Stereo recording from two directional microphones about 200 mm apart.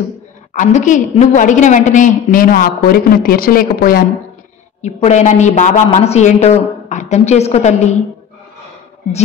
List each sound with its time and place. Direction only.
0.5 s a woman's voice: 40° left (ahead or behind)
4.8 s a woman's voice: 35° left (ahead or behind)